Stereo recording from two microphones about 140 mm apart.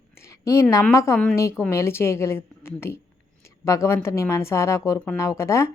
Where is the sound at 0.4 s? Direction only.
20° left (ahead or behind).